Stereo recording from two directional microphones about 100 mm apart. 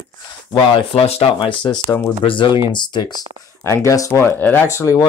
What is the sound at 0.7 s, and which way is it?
A man's voice, 70° left (ahead or behind).